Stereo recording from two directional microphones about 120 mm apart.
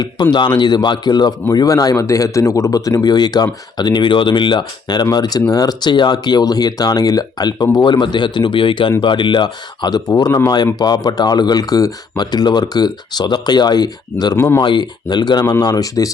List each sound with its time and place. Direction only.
0.0 s a man's voice: 35° left (ahead or behind)
14.3 s speech: 20° left (ahead or behind)
14.6 s a man's voice: 40° left (ahead or behind)